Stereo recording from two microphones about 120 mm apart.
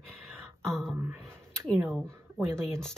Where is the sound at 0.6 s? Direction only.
5° left (ahead or behind).